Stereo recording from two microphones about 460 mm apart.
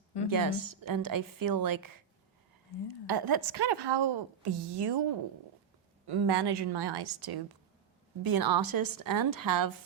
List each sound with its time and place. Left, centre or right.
0.3 s a woman's voice: right
3.1 s a woman's voice: right
6.1 s a woman's voice: right